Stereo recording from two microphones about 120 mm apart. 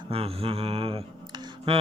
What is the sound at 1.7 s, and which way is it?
Mantra, 55° right (ahead or behind).